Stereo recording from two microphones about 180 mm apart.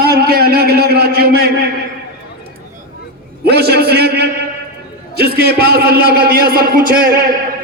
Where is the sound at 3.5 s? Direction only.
60° right (ahead or behind).